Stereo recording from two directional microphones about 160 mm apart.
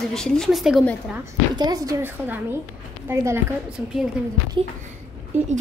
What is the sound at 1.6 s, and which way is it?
A woman's voice, 20° right (ahead or behind).